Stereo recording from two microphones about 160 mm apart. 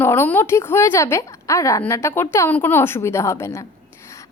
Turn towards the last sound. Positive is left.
turn(degrees=15)  # may be behind; listen again after turning